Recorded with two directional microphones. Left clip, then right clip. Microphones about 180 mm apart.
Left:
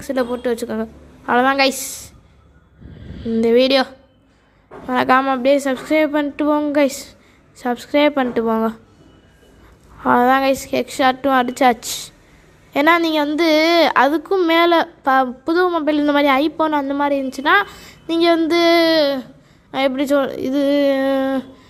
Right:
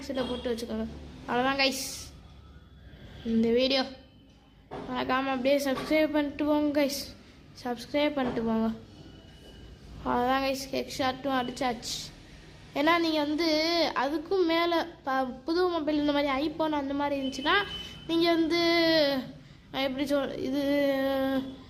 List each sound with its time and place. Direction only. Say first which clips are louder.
0.0 s a woman's voice: left 12 dB; 45° left (ahead or behind)
3.3 s a woman's voice: left 12 dB; 45° left (ahead or behind)
4.9 s a woman's voice: left 15 dB; 50° left (ahead or behind)
5.2 s speech: left 11 dB; 35° left (ahead or behind)
10.0 s a woman's voice: left 13 dB; 45° left (ahead or behind)